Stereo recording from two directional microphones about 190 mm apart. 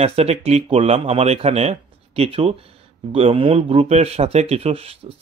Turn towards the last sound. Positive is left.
turn(degrees=-30)  # may be behind; listen again after turning